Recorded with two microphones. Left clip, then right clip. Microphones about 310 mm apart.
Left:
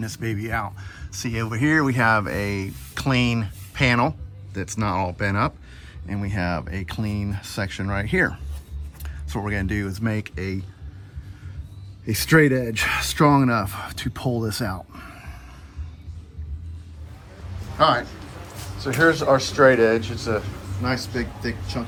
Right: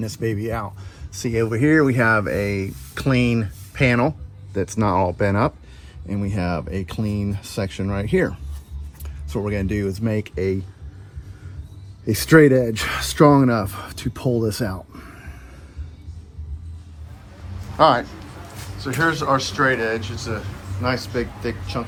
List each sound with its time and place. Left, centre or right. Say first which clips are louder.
0.0 s speech: right 5 dB; centre
12.0 s speech: right 4 dB; centre
14.3 s a sound: right 4 dB; centre
17.7 s a man's voice: right 3 dB; centre
18.0 s a man's voice: right 1 dB; centre
18.5 s a sound: even; centre
18.8 s speech: left 2 dB; centre
20.8 s speech: right 3 dB; centre